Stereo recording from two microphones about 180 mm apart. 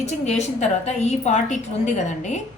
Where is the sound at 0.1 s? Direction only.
40° left (ahead or behind).